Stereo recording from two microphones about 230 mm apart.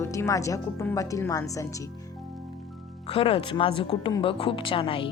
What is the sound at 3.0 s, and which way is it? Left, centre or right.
Speech, left.